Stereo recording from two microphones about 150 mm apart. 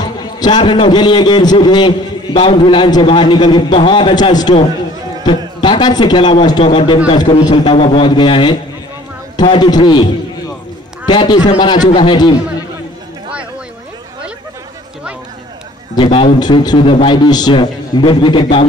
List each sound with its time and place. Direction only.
0.0 s a man's voice: 25° left (ahead or behind)
11.1 s a man's voice: 30° left (ahead or behind)
16.0 s a man's voice: 35° left (ahead or behind)